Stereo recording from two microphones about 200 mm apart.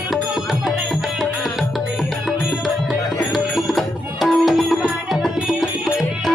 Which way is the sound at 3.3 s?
Centre (ahead or behind).